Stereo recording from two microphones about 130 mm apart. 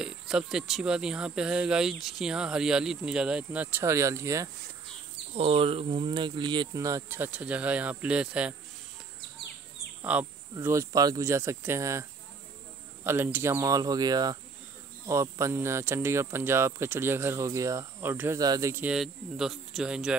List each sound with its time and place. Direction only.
0.0 s speech: 5° right (ahead or behind); by 4.5 s 20° right (ahead or behind)
5.3 s speech: 50° right (ahead or behind)
6.7 s speech: 25° right (ahead or behind); by 8.5 s 10° right (ahead or behind)
10.1 s speech: 10° right (ahead or behind)
10.6 s speech: 20° right (ahead or behind)
18.4 s speech: 30° right (ahead or behind)
18.7 s speech: 15° right (ahead or behind)
18.9 s speech: 5° right (ahead or behind)